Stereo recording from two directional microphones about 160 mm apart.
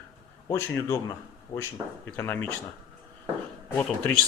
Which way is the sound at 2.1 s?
10° left (ahead or behind).